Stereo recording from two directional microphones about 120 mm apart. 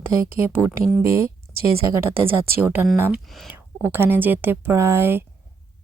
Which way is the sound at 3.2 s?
Centre (ahead or behind).